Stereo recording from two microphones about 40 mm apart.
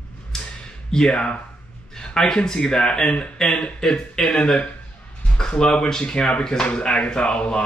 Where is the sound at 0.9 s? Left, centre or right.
Centre.